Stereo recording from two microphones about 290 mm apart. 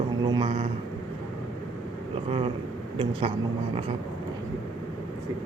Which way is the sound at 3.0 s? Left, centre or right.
Centre.